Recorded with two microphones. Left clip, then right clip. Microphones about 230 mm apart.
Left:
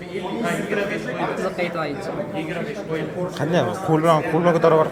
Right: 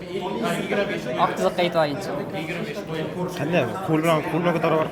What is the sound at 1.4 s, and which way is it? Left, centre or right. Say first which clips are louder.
Speech: right 4 dB; right.